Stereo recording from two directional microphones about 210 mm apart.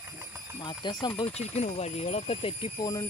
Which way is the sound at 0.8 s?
20° left (ahead or behind).